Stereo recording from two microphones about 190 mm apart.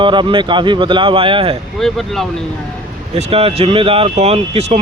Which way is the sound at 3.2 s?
30° right (ahead or behind).